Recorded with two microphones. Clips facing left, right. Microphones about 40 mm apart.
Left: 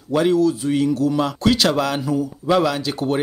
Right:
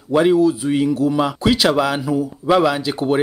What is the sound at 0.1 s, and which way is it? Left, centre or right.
Speech, centre.